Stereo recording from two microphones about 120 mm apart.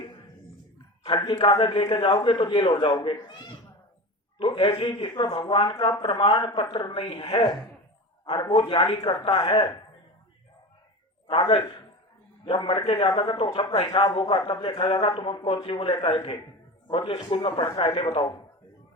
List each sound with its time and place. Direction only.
1.0 s a man's voice: 40° left (ahead or behind)
4.4 s a man's voice: 45° left (ahead or behind)
6.0 s a man's voice: 45° left (ahead or behind); by 8.5 s 30° left (ahead or behind)
8.5 s a man's voice: 45° left (ahead or behind)
11.3 s a man's voice: 45° left (ahead or behind)
13.8 s a man's voice: 40° left (ahead or behind)